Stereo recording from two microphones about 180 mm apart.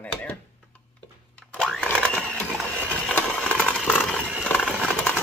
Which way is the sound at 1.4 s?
5° left (ahead or behind).